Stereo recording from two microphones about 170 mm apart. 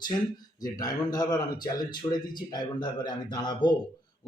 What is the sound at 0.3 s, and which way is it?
Speech, 20° left (ahead or behind).